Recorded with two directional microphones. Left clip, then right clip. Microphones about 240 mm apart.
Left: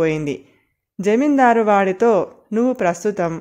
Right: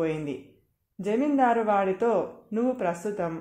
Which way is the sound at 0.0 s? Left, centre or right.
Left.